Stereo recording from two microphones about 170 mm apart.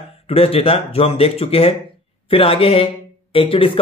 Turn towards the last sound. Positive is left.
turn(degrees=30)  # may be behind; listen again after turning